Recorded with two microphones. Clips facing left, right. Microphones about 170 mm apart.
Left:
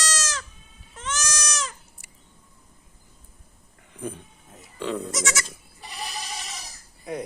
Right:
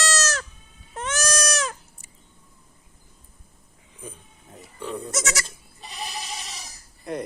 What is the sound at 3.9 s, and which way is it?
Speech, 60° left (ahead or behind).